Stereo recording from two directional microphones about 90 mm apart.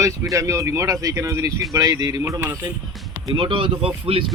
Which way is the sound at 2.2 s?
35° right (ahead or behind).